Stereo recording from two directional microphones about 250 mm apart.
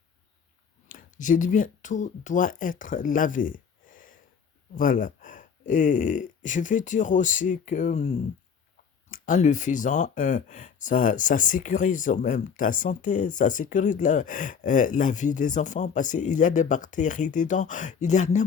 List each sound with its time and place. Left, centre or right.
0.9 s speech: left